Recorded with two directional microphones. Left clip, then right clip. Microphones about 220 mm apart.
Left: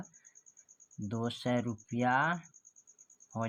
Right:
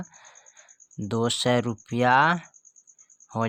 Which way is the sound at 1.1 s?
45° right (ahead or behind).